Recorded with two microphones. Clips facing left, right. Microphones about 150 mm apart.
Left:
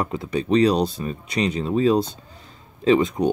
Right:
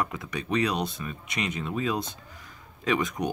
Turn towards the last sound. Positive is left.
turn(degrees=25)  # may be behind; listen again after turning